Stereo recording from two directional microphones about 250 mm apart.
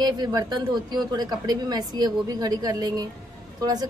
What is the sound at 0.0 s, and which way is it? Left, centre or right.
A woman's voice, centre.